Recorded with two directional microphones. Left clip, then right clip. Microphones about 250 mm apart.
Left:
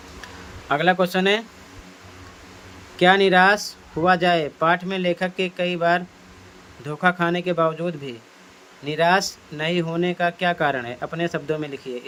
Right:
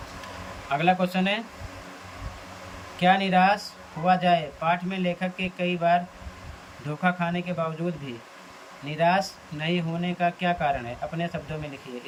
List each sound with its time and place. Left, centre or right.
0.7 s speech: centre
3.0 s speech: centre